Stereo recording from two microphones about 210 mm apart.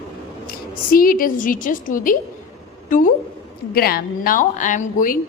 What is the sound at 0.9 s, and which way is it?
A woman's voice, 40° left (ahead or behind).